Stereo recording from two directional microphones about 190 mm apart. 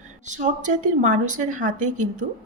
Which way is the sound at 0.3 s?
40° right (ahead or behind).